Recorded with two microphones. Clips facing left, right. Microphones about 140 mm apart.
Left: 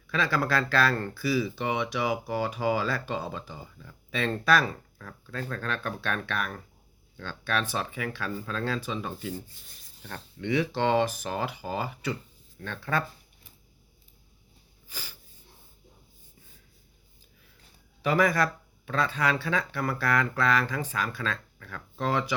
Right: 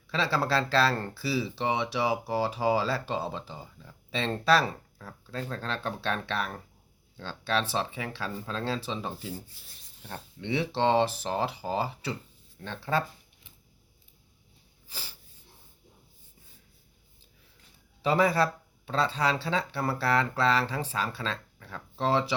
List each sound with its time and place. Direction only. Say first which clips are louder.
0.1 s speech: even; 30° right (ahead or behind)
9.3 s speech: left 2 dB; 5° right (ahead or behind)
10.1 s speech: left 3 dB; 25° right (ahead or behind)
14.8 s speech: left 1 dB; 30° right (ahead or behind)
18.0 s speech: even; 30° right (ahead or behind)